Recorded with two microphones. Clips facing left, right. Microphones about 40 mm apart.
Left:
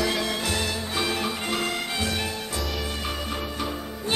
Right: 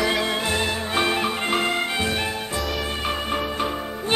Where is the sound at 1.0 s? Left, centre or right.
Right.